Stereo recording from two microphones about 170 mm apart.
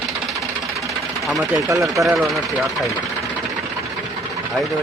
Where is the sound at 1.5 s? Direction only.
20° right (ahead or behind).